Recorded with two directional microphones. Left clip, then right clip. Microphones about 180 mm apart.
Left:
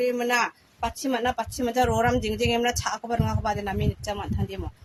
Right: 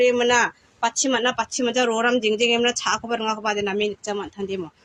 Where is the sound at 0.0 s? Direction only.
20° left (ahead or behind).